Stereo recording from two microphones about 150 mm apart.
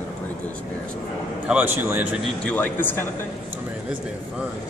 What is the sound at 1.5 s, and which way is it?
Speech, 10° right (ahead or behind).